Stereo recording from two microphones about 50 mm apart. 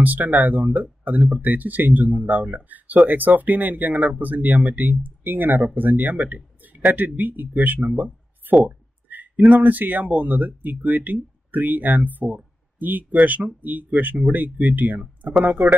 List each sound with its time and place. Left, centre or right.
0.0 s speech: right
8.6 s a sound: right
9.6 s speech: right